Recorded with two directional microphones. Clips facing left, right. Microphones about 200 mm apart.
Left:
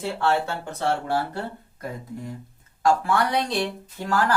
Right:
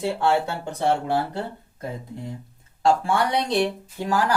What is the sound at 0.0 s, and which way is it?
Speech, 15° right (ahead or behind).